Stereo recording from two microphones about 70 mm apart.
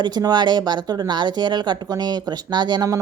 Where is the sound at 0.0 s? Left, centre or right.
Right.